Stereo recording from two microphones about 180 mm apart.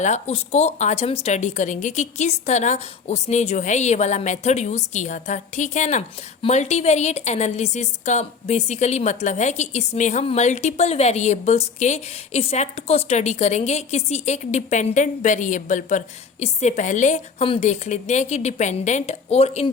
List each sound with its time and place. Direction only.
0.0 s a woman's voice: 40° left (ahead or behind)